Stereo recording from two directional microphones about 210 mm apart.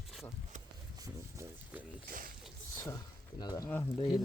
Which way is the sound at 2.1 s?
45° right (ahead or behind).